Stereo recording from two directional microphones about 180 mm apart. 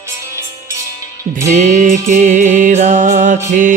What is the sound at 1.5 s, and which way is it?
Music, 45° right (ahead or behind).